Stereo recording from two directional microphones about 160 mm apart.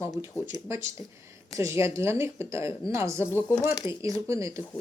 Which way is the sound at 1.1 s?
15° right (ahead or behind).